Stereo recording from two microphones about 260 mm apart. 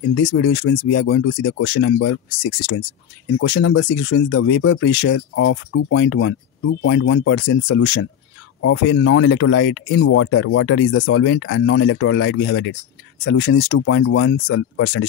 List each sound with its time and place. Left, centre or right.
0.1 s speech: left